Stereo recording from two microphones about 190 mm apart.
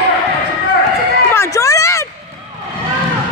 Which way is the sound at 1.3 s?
15° left (ahead or behind).